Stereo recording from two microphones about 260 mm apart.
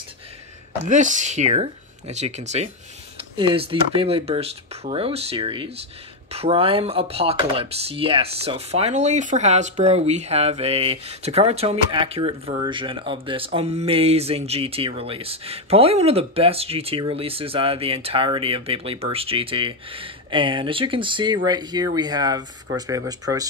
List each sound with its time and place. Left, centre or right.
0.8 s speech: right